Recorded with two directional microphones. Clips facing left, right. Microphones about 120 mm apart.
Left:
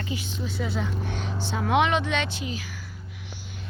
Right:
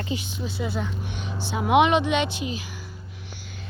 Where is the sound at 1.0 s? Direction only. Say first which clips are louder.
Left 2 dB; 15° right (ahead or behind).